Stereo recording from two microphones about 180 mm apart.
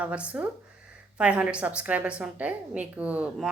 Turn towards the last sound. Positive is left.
turn(degrees=-5)  # may be behind; listen again after turning